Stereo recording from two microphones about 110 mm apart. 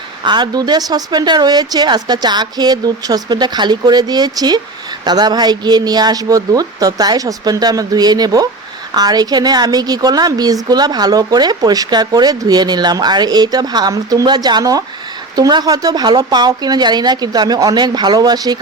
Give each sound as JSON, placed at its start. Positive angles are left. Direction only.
{"t": 0.3, "sound": "a woman's voice", "side_deg": -40}